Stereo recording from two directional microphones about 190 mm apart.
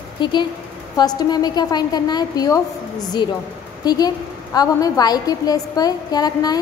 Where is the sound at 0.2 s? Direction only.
25° left (ahead or behind).